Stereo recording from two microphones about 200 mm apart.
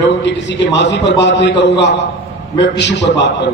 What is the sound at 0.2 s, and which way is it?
A man's voice, 60° left (ahead or behind).